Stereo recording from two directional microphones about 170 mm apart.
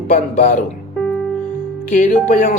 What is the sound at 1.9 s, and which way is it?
Speech, 50° left (ahead or behind).